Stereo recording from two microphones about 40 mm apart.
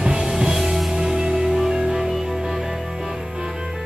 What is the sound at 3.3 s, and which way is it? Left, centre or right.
Music, right.